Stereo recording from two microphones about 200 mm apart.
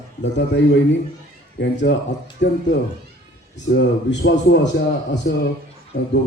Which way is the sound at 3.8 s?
60° left (ahead or behind).